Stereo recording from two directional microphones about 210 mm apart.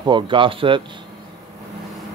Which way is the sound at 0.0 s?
20° right (ahead or behind).